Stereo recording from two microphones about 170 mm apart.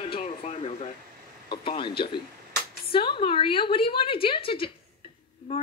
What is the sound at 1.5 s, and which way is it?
Speech, 30° left (ahead or behind).